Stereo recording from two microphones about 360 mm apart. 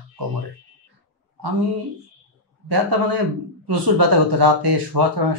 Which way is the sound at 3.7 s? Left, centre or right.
Right.